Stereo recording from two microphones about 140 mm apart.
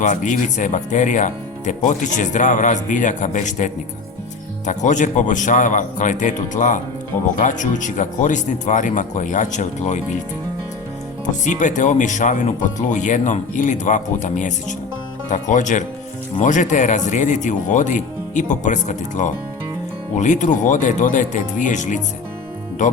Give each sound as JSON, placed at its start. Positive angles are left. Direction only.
{"t": 0.0, "sound": "speech", "side_deg": 60}
{"t": 11.4, "sound": "speech", "side_deg": 60}